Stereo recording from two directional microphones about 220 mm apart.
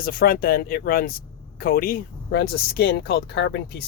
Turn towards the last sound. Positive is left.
turn(degrees=50)  # may be behind; listen again after turning